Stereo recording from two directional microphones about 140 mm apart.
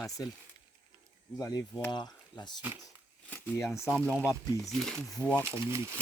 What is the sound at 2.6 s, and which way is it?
Speech, 15° right (ahead or behind).